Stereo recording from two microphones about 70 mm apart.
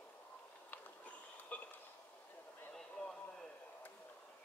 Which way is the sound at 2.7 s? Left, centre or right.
Centre.